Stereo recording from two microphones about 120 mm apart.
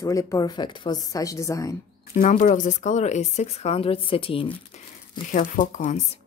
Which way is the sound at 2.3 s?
90° left.